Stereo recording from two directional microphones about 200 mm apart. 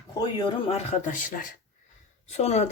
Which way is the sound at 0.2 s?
20° left (ahead or behind).